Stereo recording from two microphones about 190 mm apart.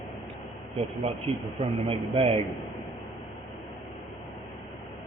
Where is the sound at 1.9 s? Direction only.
30° right (ahead or behind).